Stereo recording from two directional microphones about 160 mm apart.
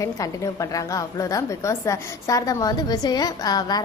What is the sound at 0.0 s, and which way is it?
A woman's voice, 20° left (ahead or behind).